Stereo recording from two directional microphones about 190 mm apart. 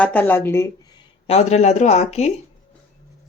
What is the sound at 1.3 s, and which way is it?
Speech, 35° left (ahead or behind).